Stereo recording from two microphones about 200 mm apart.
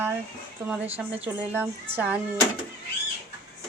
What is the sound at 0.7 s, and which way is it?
A woman's voice, 10° right (ahead or behind).